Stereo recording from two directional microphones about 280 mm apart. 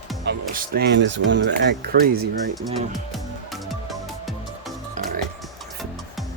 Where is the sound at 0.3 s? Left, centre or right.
Right.